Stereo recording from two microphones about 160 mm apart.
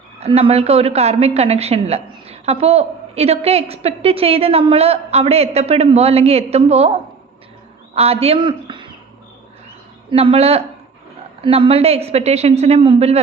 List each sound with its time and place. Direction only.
0.2 s a woman's voice: 40° right (ahead or behind)
10.1 s a woman's voice: 35° right (ahead or behind)